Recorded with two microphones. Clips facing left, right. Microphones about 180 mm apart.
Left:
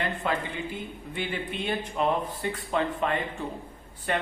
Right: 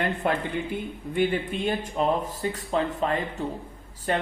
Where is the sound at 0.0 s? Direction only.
50° right (ahead or behind).